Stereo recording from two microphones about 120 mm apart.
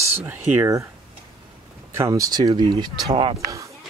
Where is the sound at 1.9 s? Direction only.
25° right (ahead or behind); by 3.3 s 45° right (ahead or behind).